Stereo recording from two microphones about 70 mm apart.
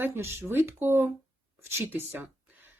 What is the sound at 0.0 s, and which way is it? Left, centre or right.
Speech, right.